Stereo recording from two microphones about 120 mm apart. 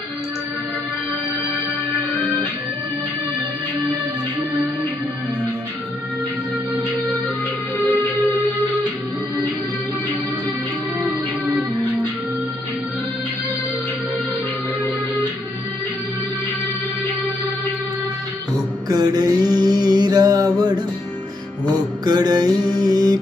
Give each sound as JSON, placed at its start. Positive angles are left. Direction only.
{"t": 18.9, "sound": "mantra", "side_deg": -30}
{"t": 22.0, "sound": "mantra", "side_deg": -35}